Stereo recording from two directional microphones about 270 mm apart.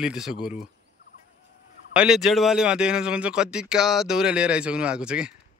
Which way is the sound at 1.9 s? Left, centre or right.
Centre.